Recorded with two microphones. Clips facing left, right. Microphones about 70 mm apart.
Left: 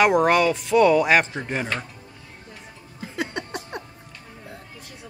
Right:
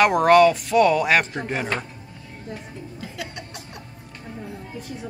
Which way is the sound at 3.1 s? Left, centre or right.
Left.